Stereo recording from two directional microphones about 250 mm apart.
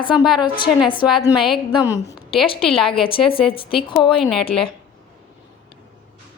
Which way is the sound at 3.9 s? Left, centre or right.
Centre.